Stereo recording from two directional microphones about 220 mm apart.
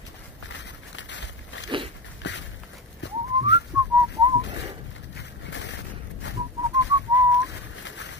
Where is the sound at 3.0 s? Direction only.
50° left (ahead or behind).